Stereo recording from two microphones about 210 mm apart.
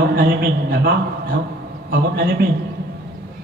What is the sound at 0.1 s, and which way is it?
Speech, 45° right (ahead or behind).